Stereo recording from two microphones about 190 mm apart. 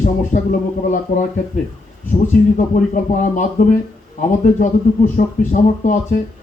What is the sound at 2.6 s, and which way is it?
Speech, 40° left (ahead or behind).